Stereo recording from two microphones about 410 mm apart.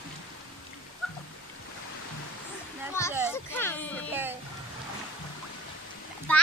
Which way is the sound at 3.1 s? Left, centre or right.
Centre.